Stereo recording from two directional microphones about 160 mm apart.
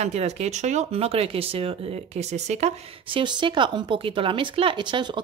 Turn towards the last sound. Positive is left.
turn(degrees=-30)  # may be behind; listen again after turning